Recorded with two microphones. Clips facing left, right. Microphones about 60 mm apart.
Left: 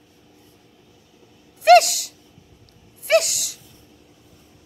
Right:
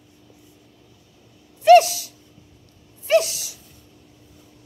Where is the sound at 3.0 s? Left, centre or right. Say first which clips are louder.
Even; left.